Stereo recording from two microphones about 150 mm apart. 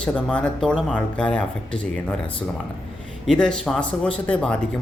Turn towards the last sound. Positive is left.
turn(degrees=5)  # may be behind; listen again after turning